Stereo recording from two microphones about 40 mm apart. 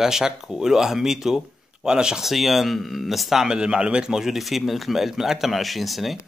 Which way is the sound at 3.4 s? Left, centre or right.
Right.